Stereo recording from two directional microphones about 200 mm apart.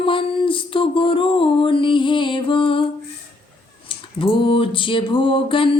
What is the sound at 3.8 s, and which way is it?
Music, 25° left (ahead or behind).